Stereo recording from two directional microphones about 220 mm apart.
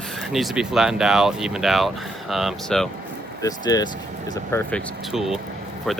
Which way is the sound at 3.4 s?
15° left (ahead or behind).